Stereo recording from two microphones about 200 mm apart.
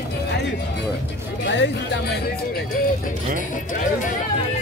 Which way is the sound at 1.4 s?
60° left (ahead or behind).